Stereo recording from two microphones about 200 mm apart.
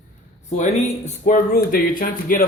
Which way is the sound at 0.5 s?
35° left (ahead or behind).